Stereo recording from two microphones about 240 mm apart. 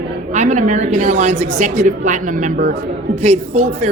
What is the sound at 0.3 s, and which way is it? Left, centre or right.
Speech, right.